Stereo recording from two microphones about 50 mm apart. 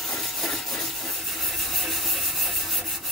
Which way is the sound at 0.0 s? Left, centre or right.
Centre.